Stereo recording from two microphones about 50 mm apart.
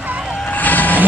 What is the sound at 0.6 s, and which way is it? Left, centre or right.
Vehicle, left.